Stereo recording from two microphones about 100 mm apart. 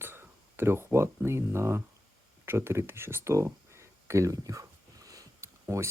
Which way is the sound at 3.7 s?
30° right (ahead or behind).